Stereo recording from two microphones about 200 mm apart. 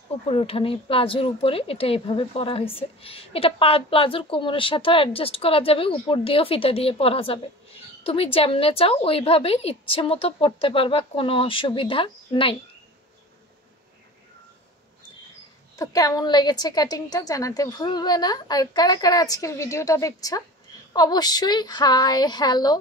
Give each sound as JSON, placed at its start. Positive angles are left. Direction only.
{"t": 0.3, "sound": "speech", "side_deg": 30}
{"t": 15.7, "sound": "speech", "side_deg": 15}